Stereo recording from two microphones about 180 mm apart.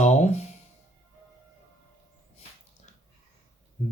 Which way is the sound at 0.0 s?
40° left (ahead or behind).